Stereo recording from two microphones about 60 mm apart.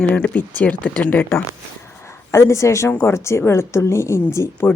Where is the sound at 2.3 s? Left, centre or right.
Left.